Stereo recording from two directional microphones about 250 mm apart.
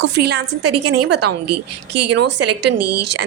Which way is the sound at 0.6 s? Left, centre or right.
Right.